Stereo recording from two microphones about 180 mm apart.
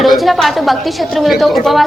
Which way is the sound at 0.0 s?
Centre (ahead or behind).